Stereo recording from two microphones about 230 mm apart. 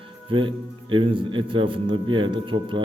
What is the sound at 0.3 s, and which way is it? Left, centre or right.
A man's voice, right.